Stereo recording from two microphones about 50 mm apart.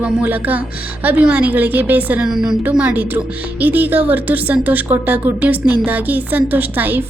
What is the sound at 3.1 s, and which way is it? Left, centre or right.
A woman's voice, right.